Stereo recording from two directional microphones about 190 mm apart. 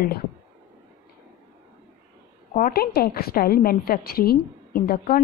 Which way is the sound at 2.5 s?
50° left (ahead or behind).